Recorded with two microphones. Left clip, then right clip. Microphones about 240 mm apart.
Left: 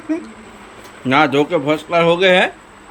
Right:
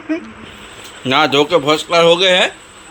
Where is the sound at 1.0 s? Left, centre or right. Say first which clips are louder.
Right 1 dB; centre.